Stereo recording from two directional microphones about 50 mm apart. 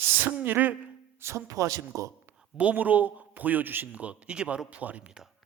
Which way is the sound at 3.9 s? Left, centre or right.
Right.